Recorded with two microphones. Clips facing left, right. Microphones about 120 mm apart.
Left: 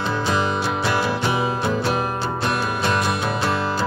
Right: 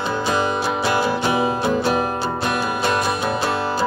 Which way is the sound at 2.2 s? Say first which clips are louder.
Right 1 dB; 5° right (ahead or behind).